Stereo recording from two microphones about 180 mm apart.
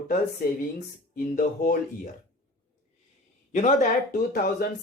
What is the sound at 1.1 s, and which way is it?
Speech, 50° left (ahead or behind).